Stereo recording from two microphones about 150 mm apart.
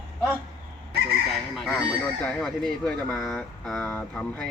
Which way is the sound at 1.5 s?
Centre (ahead or behind).